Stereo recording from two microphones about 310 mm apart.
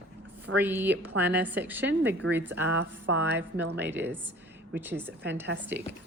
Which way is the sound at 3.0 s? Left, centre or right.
Right.